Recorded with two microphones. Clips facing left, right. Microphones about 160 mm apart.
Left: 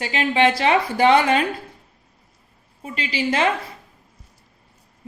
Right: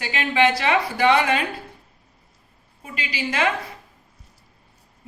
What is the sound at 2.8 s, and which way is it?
Speech, 30° left (ahead or behind).